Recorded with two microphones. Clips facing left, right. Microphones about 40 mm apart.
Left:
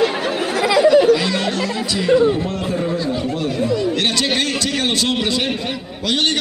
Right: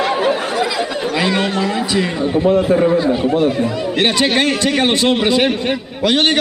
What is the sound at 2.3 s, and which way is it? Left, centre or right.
A man's voice, centre.